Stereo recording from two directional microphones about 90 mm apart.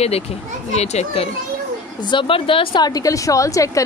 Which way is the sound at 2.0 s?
65° left (ahead or behind).